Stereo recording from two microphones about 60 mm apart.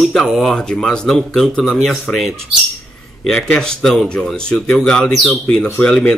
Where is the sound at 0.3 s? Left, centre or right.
Centre.